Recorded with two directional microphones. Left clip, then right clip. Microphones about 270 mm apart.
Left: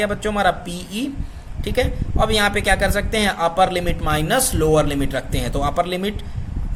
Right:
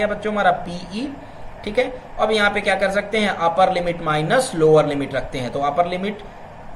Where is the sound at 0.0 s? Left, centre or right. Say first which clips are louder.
Even; left.